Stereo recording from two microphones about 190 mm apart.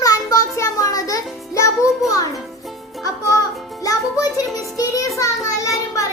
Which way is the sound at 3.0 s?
20° left (ahead or behind).